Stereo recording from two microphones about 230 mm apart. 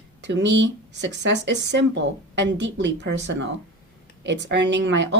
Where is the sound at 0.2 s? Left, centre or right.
Right.